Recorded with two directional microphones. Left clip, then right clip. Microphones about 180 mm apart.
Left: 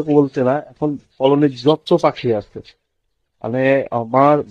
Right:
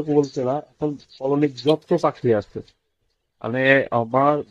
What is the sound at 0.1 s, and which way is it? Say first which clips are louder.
Speech: left 6 dB; 35° left (ahead or behind).